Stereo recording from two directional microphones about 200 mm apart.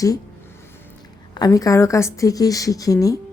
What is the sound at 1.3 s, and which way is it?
Speech, 20° left (ahead or behind).